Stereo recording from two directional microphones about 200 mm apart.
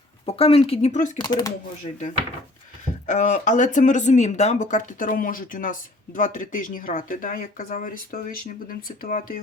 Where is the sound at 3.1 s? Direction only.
40° left (ahead or behind).